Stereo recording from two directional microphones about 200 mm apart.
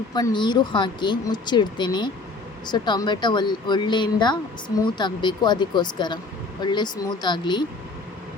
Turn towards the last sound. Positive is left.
turn(degrees=20)  # may be behind; listen again after turning